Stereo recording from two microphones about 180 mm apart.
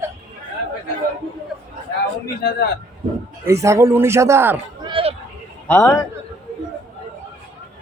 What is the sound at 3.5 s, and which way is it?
Speech, 15° right (ahead or behind).